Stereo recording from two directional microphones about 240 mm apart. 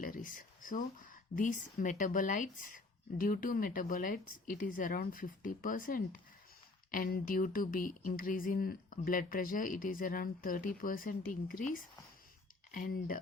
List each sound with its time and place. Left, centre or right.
0.0 s speech: left